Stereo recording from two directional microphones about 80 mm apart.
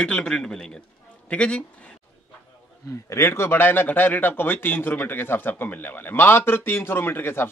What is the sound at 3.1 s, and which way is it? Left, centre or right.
A man's voice, left.